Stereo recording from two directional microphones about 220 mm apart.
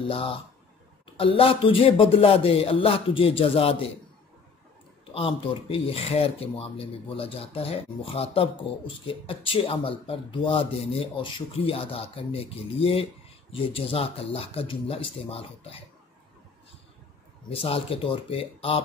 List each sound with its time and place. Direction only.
1.0 s speech: 25° left (ahead or behind)
5.1 s speech: 25° left (ahead or behind)
17.5 s speech: 25° left (ahead or behind)